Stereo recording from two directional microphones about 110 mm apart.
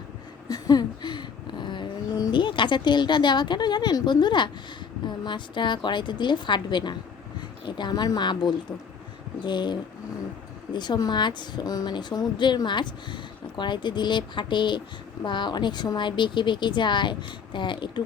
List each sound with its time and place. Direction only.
0.4 s a sound: 35° left (ahead or behind)
5.0 s speech: 45° left (ahead or behind)
10.8 s speech: 40° left (ahead or behind)